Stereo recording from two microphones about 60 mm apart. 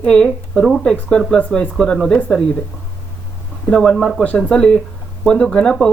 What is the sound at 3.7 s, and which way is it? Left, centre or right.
Speech, centre.